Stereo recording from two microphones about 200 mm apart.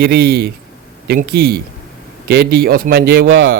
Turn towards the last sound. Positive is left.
turn(degrees=-65)  # may be behind; listen again after turning